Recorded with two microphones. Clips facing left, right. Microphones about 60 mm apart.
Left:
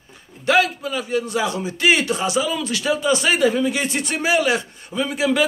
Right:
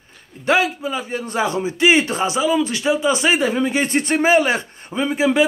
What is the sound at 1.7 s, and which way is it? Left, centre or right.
A man's voice, right.